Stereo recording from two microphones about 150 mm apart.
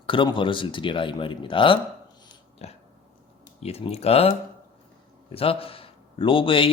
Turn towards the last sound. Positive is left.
turn(degrees=35)  # may be behind; listen again after turning